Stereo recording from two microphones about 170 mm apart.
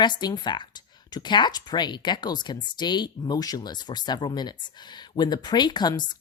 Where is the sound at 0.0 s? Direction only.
25° left (ahead or behind).